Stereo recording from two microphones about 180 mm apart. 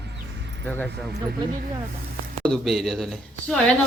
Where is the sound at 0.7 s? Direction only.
5° left (ahead or behind).